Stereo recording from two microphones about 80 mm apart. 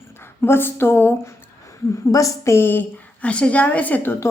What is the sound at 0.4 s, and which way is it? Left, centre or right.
Speech, left.